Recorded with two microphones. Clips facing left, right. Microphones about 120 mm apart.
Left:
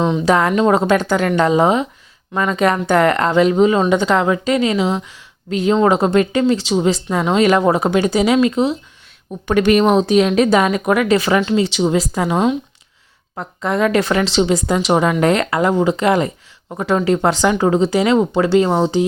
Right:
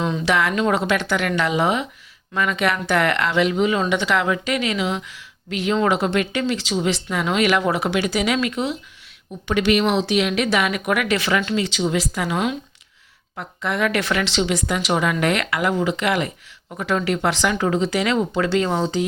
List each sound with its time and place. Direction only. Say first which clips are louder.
0.3 s a woman's voice: left 5 dB; 40° left (ahead or behind)
0.5 s speech: left 6 dB; 25° left (ahead or behind)
0.8 s a woman's voice: left 6 dB; 40° left (ahead or behind)
9.5 s a woman's voice: left 6 dB; 45° left (ahead or behind); by 12.5 s 25° left (ahead or behind)
13.3 s a woman's voice: left 5 dB; 35° left (ahead or behind)